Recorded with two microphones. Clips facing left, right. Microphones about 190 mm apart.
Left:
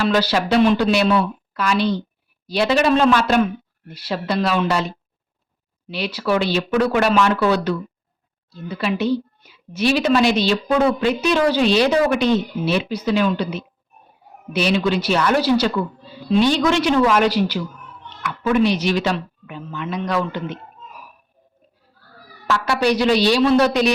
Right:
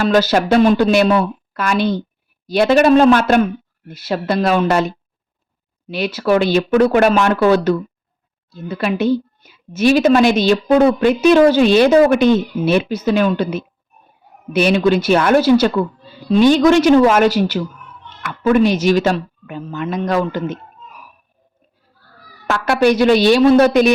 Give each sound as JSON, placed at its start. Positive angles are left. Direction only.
{"t": 0.0, "sound": "a woman's voice", "side_deg": -45}
{"t": 22.4, "sound": "a woman's voice", "side_deg": -55}